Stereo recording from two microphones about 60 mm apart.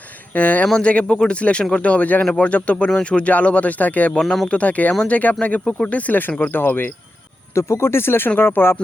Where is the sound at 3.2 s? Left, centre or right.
Left.